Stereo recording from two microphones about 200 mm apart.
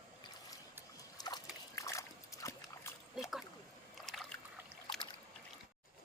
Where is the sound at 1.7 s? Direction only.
15° left (ahead or behind).